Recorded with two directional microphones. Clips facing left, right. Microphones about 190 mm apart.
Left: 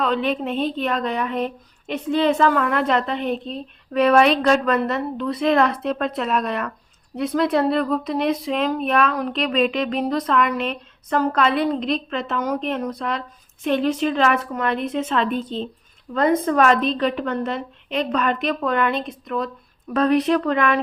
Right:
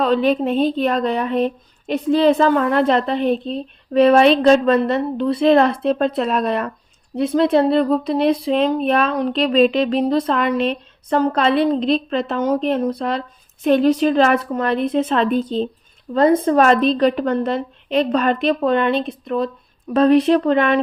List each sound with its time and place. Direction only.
0.0 s speech: 35° right (ahead or behind)